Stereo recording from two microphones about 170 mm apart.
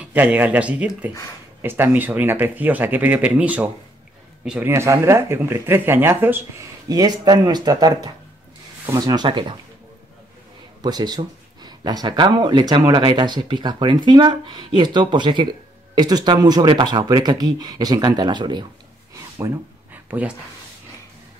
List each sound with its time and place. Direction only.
0.0 s speech: 10° right (ahead or behind); by 9.6 s 30° right (ahead or behind)
10.8 s speech: 25° right (ahead or behind)
19.1 s a sound: 15° right (ahead or behind)